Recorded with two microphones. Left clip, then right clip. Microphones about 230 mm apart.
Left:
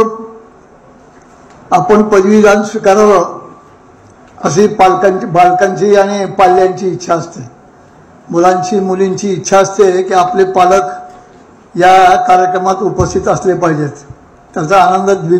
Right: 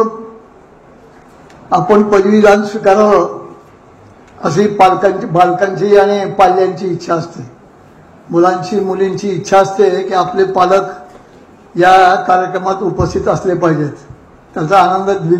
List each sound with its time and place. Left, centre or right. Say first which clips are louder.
1.7 s a man's voice: left 1 dB; left
4.4 s a man's voice: left 1 dB; left